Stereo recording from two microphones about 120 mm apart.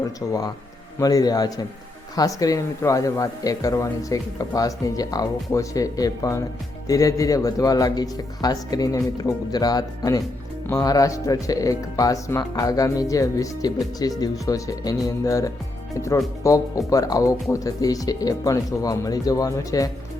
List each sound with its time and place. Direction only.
0.0 s a man's voice: 30° left (ahead or behind)